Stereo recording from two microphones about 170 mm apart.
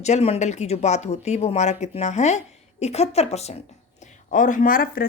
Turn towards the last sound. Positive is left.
turn(degrees=60)  # may be behind; listen again after turning